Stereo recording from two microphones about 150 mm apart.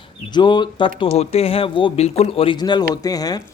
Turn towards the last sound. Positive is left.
turn(degrees=25)  # may be behind; listen again after turning